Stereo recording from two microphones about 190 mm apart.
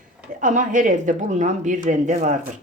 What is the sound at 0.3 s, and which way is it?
Speech, 45° right (ahead or behind).